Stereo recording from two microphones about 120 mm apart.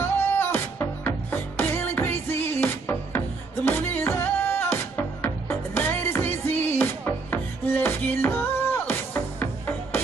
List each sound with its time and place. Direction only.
0.0 s music: 20° left (ahead or behind)